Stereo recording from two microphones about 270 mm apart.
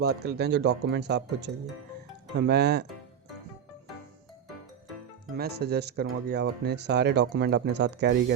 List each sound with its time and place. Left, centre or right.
0.0 s speech: right
2.5 s speech: right
5.4 s speech: right